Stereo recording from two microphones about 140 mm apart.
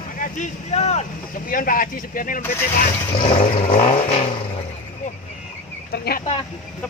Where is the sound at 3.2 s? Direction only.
45° left (ahead or behind).